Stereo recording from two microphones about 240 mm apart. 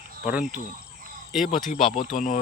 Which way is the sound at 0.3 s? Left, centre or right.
Centre.